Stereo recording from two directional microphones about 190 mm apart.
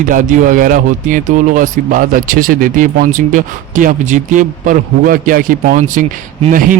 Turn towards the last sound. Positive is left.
turn(degrees=-45)  # may be behind; listen again after turning